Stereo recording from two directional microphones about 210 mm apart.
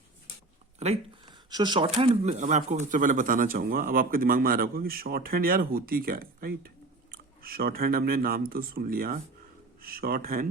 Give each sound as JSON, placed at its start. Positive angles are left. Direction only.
{"t": 1.5, "sound": "speech", "side_deg": -20}